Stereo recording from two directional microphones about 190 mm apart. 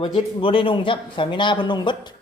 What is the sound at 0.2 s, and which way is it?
A man's voice, 30° left (ahead or behind).